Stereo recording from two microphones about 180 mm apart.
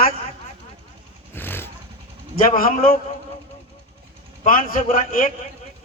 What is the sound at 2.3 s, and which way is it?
Speech, 50° left (ahead or behind).